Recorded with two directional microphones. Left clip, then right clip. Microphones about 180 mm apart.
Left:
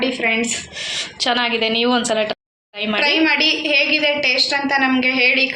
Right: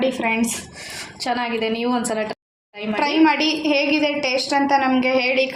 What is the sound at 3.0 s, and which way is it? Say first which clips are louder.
A woman's voice: left 1 dB; 65° right (ahead or behind).